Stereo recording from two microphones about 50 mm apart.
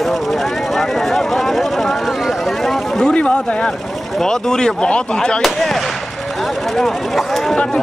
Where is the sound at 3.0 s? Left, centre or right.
Left.